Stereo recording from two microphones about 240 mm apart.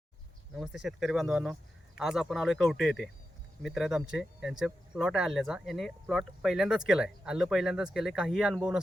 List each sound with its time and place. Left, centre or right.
0.5 s speech: centre